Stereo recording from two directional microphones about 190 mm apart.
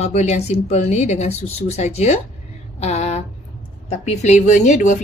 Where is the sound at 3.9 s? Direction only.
35° left (ahead or behind).